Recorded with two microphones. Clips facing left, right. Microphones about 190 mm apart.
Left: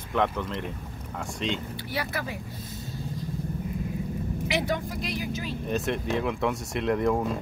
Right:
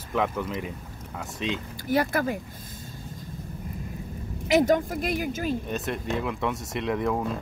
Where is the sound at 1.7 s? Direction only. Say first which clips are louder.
Right 7 dB; 45° right (ahead or behind).